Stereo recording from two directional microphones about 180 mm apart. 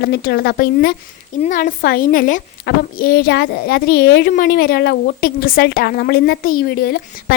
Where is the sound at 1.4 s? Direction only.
45° left (ahead or behind).